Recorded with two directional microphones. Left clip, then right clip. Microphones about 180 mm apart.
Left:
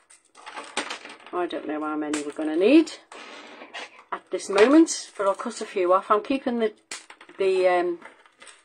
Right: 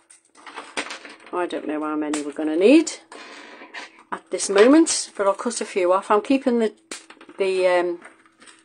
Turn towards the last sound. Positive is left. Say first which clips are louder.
# right 2 dB
turn(degrees=-35)  # may be behind; listen again after turning